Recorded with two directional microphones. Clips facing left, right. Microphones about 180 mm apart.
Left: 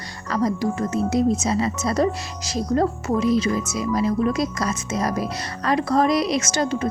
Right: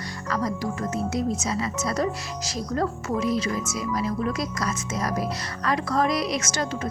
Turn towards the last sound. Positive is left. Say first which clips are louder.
# left 6 dB
turn(degrees=25)  # may be behind; listen again after turning